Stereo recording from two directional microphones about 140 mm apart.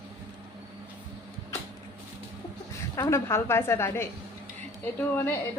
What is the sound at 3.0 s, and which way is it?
A woman's voice, 20° left (ahead or behind).